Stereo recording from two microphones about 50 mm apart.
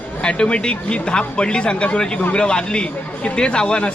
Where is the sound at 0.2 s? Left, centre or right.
Centre.